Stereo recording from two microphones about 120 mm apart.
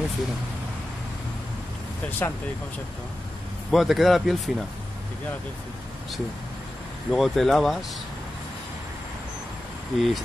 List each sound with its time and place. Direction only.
2.0 s speech: 15° left (ahead or behind)
3.7 s speech: centre (ahead or behind)
7.1 s speech: 5° left (ahead or behind)
9.9 s speech: centre (ahead or behind)